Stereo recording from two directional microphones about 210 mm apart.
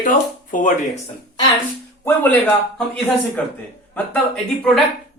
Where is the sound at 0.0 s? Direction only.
40° left (ahead or behind).